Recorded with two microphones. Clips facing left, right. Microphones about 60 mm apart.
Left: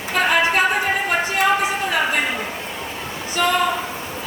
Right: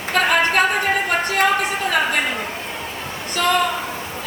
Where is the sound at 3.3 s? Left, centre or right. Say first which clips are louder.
Right 1 dB; right.